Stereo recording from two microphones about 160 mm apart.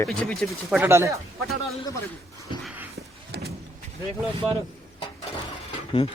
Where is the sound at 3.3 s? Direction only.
90° right.